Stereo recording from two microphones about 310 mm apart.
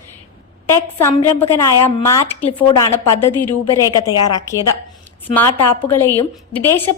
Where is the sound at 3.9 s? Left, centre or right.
Centre.